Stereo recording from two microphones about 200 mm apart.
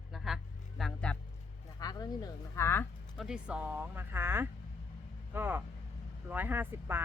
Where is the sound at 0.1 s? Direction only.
Centre (ahead or behind).